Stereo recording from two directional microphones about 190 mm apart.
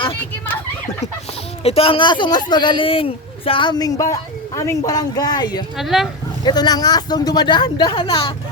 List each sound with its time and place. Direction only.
1.6 s speech: 30° left (ahead or behind)
5.7 s speech: centre (ahead or behind)
6.4 s speech: 20° left (ahead or behind)